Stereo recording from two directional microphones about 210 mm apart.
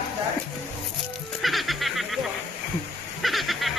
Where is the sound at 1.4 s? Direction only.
Centre (ahead or behind).